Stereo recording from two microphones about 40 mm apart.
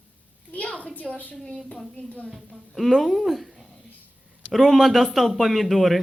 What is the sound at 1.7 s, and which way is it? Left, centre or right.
Speech, left.